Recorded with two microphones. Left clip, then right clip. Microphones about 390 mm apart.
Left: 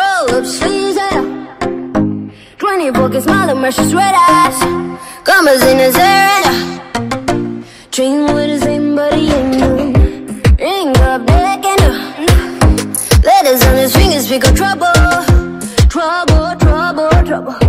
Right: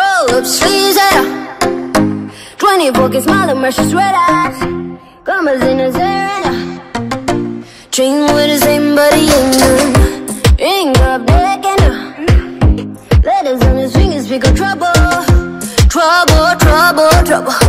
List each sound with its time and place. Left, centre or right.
0.0 s music: centre; by 1.3 s right
1.6 s music: right
2.6 s music: centre
5.2 s music: left; by 6.6 s centre
7.1 s music: centre; by 9.8 s right
9.8 s music: right
10.4 s music: centre
12.3 s music: left
13.1 s music: left; by 17.4 s right